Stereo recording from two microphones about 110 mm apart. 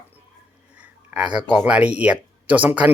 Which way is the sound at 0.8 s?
10° right (ahead or behind).